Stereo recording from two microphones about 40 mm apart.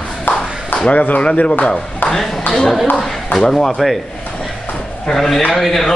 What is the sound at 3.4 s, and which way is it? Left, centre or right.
Speech, centre.